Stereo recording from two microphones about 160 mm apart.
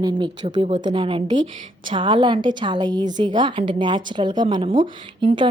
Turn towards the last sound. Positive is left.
turn(degrees=-30)  # may be behind; listen again after turning